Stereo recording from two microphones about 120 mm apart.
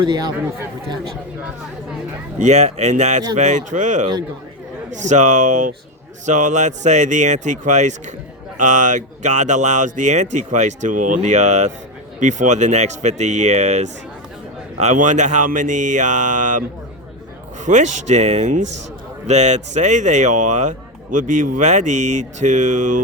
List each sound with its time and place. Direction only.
0.0 s speech: 40° right (ahead or behind)
2.4 s speech: 75° right (ahead or behind)
12.2 s speech: 90° right
17.7 s speech: 85° right
19.3 s speech: 70° right (ahead or behind); by 23.0 s 90° right